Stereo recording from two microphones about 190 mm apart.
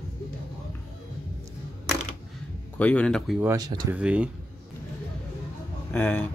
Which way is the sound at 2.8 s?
5° left (ahead or behind).